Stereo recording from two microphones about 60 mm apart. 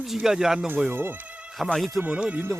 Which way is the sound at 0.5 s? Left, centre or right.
Right.